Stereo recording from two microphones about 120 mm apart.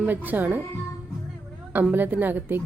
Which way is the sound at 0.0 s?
15° right (ahead or behind).